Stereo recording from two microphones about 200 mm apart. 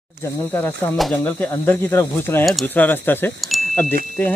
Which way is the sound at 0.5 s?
10° left (ahead or behind).